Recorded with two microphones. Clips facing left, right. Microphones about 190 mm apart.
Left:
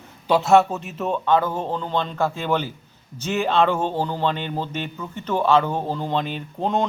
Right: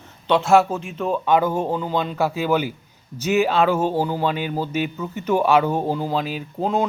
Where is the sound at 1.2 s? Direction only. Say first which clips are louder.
Right 2 dB; 10° right (ahead or behind).